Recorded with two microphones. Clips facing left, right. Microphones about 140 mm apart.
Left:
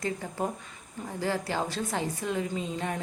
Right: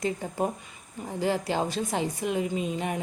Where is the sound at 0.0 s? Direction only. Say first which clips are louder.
Right 3 dB; 20° right (ahead or behind).